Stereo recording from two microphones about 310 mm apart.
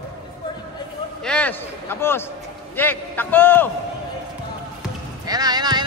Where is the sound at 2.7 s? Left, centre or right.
Centre.